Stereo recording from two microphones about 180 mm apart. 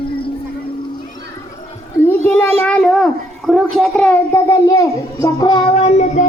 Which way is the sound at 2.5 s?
5° left (ahead or behind).